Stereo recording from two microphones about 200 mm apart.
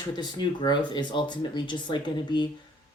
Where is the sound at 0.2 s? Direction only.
20° left (ahead or behind).